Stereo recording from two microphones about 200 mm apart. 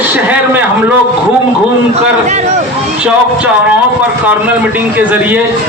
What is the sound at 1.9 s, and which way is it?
Speech, 35° right (ahead or behind).